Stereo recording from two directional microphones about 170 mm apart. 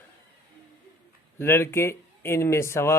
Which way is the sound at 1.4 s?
15° left (ahead or behind).